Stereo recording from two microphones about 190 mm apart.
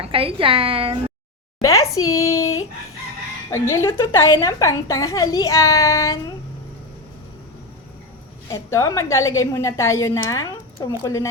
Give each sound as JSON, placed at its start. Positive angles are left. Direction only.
{"t": 0.0, "sound": "a woman's voice", "side_deg": -30}
{"t": 1.6, "sound": "a sound", "side_deg": 15}
{"t": 2.1, "sound": "a woman's voice", "side_deg": 15}
{"t": 3.5, "sound": "a woman's voice", "side_deg": 15}
{"t": 8.4, "sound": "a woman's voice", "side_deg": 15}